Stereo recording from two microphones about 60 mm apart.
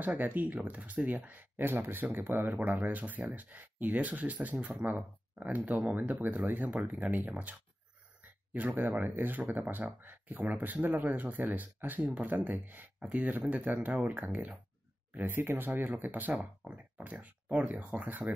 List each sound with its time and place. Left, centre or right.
0.0 s speech: right
15.1 s speech: right